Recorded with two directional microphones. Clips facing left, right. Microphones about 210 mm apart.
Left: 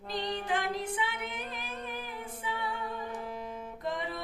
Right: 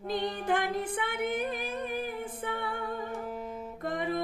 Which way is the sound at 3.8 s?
50° right (ahead or behind).